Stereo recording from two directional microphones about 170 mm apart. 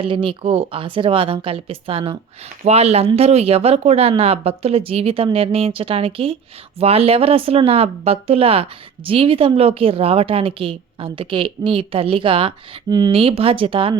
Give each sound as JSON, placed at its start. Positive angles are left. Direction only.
{"t": 0.0, "sound": "a woman's voice", "side_deg": -30}